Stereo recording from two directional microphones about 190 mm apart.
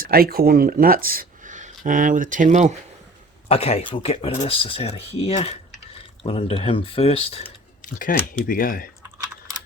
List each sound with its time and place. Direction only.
0.0 s speech: 50° right (ahead or behind)
3.5 s speech: 35° left (ahead or behind)
7.8 s speech: 45° left (ahead or behind)